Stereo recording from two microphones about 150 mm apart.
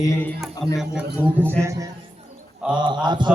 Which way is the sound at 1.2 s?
15° right (ahead or behind).